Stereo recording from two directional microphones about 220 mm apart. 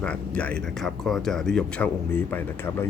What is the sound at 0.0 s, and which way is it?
Speech, 5° left (ahead or behind).